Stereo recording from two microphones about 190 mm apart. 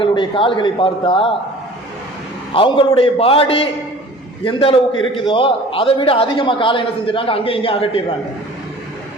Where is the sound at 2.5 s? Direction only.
25° left (ahead or behind).